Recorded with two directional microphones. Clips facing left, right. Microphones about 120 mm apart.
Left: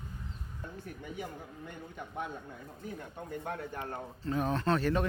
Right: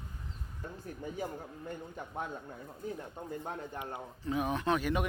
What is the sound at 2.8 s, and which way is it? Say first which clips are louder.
Speech: right 2 dB; 25° right (ahead or behind).